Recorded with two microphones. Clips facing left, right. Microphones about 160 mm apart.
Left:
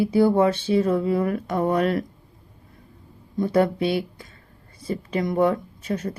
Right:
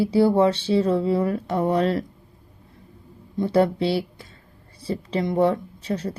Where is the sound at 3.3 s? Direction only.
30° right (ahead or behind).